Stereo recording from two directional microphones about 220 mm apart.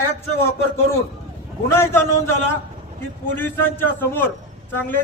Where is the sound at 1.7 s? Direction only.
10° left (ahead or behind).